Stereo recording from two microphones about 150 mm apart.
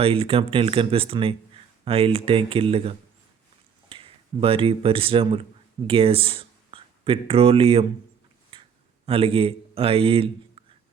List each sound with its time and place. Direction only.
0.0 s speech: 40° right (ahead or behind)
8.5 s a sound: 35° right (ahead or behind)
9.0 s a man's voice: 40° right (ahead or behind)